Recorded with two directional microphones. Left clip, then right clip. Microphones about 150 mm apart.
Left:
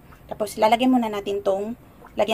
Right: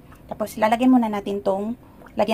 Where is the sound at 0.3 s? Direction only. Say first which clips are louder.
Left 2 dB; centre (ahead or behind).